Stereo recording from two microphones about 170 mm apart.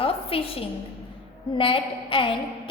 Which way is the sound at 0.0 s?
35° left (ahead or behind).